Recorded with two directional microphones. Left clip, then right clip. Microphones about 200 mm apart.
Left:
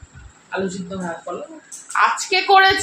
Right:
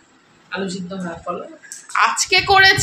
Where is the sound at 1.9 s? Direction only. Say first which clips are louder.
Right 1 dB; 5° right (ahead or behind).